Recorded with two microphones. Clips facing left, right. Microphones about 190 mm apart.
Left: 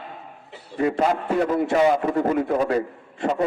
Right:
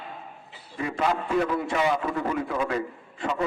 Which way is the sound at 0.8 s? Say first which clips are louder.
Left 5 dB; 40° left (ahead or behind).